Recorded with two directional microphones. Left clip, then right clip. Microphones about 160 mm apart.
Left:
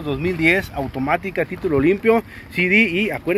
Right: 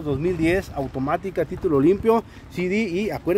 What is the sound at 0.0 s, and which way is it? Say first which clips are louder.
Speech: left 4 dB; 15° right (ahead or behind).